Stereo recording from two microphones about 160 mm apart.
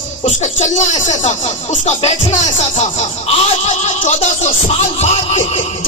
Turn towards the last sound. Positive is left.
turn(degrees=40)  # may be behind; listen again after turning